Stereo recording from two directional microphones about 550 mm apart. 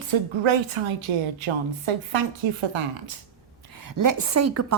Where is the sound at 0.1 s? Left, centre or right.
Right.